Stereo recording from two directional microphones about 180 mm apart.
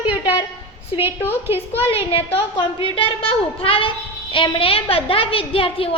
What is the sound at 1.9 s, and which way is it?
A woman's voice, 30° left (ahead or behind).